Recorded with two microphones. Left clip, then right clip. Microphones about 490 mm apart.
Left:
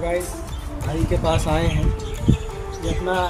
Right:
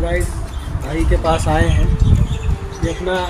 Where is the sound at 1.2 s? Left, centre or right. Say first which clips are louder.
Right 5 dB; left.